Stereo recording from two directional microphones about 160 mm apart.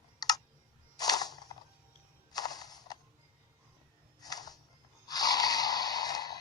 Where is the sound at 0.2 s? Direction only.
25° left (ahead or behind).